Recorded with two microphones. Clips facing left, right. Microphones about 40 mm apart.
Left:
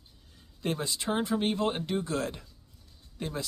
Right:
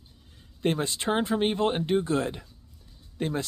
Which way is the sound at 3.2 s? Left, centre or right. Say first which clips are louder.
Right 6 dB; right.